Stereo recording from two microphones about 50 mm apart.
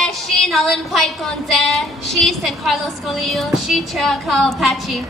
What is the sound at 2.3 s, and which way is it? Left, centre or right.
A woman's voice, centre.